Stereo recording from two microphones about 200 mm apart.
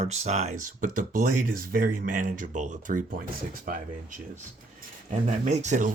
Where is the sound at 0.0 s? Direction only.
35° right (ahead or behind).